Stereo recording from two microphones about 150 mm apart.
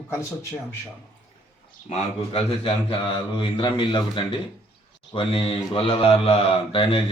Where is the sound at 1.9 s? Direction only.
40° left (ahead or behind).